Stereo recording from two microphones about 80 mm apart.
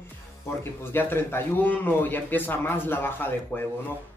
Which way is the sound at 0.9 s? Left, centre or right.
Left.